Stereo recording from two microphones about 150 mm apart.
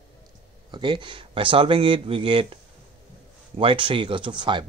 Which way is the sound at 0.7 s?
30° right (ahead or behind).